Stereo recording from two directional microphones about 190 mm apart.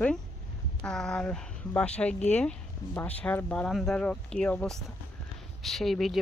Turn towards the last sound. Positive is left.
turn(degrees=0)  # may be behind; listen again after turning